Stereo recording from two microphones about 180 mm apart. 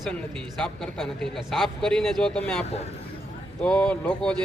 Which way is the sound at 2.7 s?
35° left (ahead or behind).